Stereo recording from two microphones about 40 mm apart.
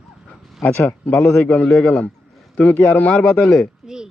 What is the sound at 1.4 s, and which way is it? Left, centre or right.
Speech, left.